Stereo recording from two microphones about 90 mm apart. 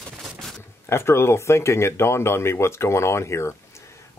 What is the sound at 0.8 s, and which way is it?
Speech, 30° left (ahead or behind).